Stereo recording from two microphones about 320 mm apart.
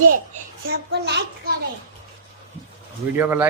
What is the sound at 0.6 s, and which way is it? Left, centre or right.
Speech, right.